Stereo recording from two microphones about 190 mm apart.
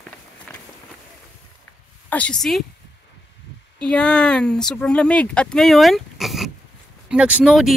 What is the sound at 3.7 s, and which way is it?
Speech, 5° left (ahead or behind).